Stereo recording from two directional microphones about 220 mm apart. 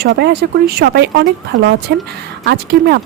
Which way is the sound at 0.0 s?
50° right (ahead or behind).